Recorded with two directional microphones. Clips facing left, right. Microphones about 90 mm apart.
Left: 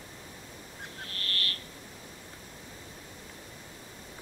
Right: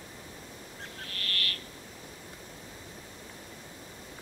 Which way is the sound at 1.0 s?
30° left (ahead or behind).